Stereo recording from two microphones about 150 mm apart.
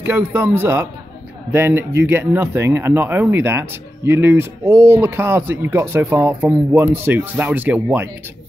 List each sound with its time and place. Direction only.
0.0 s speech: 15° right (ahead or behind)